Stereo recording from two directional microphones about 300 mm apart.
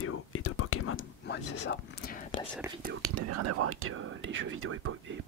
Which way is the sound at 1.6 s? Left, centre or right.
Left.